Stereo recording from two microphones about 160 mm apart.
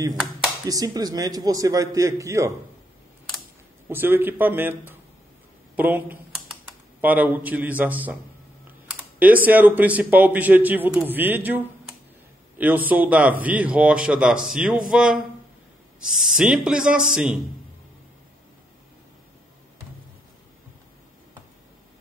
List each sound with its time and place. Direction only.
0.7 s a man's voice: 25° right (ahead or behind)
3.9 s a man's voice: 15° right (ahead or behind)
9.2 s a man's voice: 10° right (ahead or behind)